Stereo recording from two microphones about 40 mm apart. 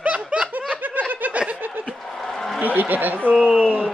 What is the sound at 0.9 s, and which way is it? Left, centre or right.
Snicker, right.